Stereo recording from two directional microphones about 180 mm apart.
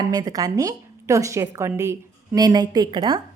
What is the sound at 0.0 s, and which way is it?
A woman's voice, 20° right (ahead or behind).